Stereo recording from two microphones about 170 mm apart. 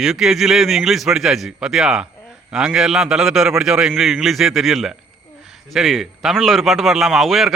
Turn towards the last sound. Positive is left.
turn(degrees=0)  # may be behind; listen again after turning